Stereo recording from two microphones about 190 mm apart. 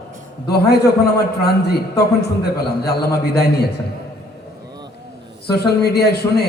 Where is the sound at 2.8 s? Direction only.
55° left (ahead or behind).